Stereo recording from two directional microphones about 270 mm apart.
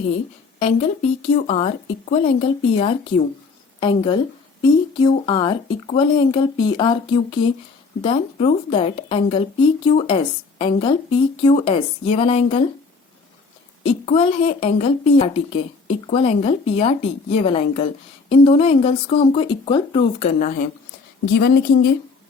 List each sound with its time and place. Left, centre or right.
0.6 s a woman's voice: left
13.8 s a woman's voice: left